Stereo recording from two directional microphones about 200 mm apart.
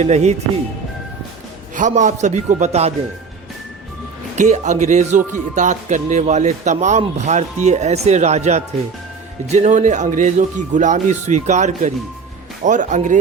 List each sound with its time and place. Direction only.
0.0 s speech: 35° right (ahead or behind)
1.7 s speech: 40° right (ahead or behind)
4.4 s speech: 35° right (ahead or behind)